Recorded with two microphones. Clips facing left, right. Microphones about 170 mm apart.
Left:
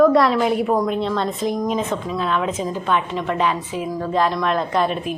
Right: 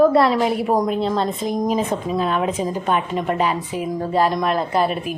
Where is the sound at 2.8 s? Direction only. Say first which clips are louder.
Even; 45° right (ahead or behind).